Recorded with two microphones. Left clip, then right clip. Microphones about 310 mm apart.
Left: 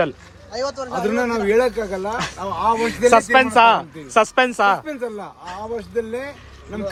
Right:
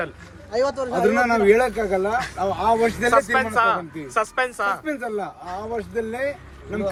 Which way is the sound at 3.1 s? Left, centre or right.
Left.